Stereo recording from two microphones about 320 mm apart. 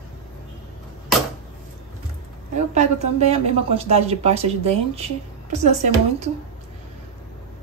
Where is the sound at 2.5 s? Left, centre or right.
Right.